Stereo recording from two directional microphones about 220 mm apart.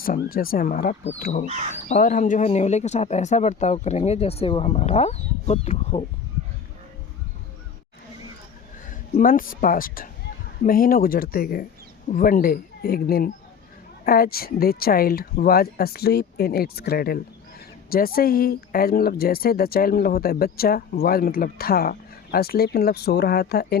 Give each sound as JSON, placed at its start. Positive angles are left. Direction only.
{"t": 0.0, "sound": "speech", "side_deg": 40}
{"t": 8.9, "sound": "speech", "side_deg": 40}